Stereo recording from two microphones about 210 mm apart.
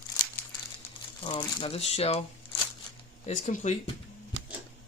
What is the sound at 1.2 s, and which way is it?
Speech, 20° left (ahead or behind).